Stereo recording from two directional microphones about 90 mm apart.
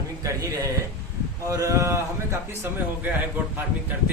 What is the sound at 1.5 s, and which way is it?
Speech, 35° right (ahead or behind).